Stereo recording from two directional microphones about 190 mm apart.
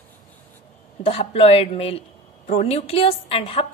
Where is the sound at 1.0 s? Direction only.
30° left (ahead or behind).